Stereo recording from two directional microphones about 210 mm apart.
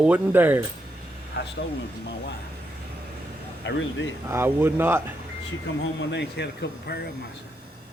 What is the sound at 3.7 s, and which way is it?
Speech, 60° left (ahead or behind).